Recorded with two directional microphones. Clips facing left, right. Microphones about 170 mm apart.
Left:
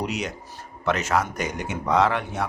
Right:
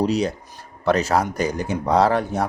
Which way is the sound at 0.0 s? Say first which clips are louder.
Right 8 dB; 35° right (ahead or behind).